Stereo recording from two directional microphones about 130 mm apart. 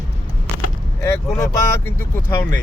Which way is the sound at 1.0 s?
20° left (ahead or behind).